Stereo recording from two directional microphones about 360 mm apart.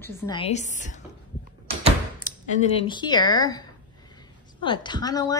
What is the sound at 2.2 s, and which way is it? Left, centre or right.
A woman's voice, centre.